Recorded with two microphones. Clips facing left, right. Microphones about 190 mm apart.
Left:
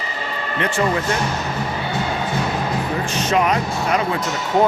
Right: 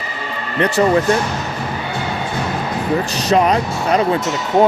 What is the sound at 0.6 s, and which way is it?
Speech, 40° right (ahead or behind).